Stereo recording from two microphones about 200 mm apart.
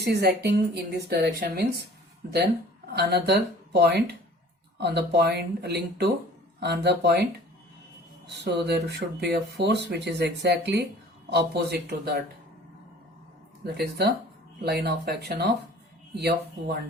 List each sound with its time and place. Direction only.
0.0 s a woman's voice: 55° right (ahead or behind)
2.9 s a woman's voice: 55° right (ahead or behind)
8.4 s a woman's voice: 55° right (ahead or behind)
13.7 s a woman's voice: 55° right (ahead or behind)